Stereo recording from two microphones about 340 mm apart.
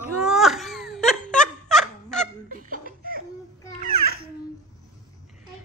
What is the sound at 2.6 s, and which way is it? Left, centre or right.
Music, right.